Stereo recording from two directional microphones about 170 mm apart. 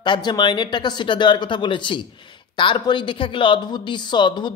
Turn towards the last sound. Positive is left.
turn(degrees=25)  # may be behind; listen again after turning